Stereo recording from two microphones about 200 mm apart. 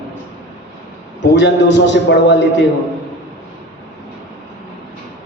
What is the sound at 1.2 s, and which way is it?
A man's voice, 60° left (ahead or behind).